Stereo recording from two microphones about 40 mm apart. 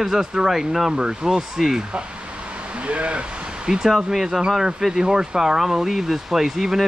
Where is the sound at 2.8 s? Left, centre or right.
Right.